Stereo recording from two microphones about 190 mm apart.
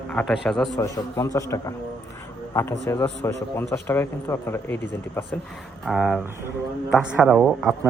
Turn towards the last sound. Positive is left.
turn(degrees=-5)  # may be behind; listen again after turning